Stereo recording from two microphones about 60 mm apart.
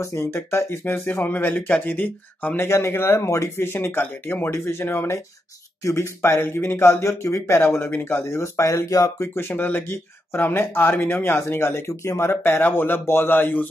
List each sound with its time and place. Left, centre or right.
0.0 s speech: left
2.7 s speech: left
4.5 s speech: left
9.3 s speech: left